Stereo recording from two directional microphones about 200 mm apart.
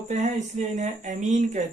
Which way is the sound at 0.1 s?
35° right (ahead or behind).